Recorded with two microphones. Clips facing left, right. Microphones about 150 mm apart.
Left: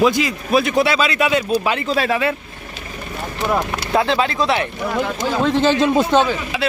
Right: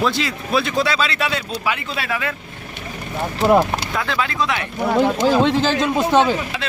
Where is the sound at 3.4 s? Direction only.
25° right (ahead or behind).